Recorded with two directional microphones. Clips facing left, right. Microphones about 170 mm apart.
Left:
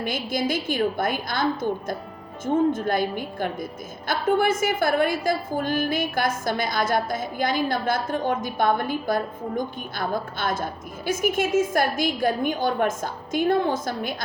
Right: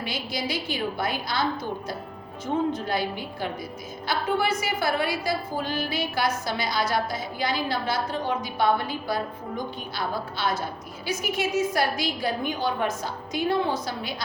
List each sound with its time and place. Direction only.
0.0 s a woman's voice: 50° left (ahead or behind)
2.7 s a woman's voice: 50° left (ahead or behind)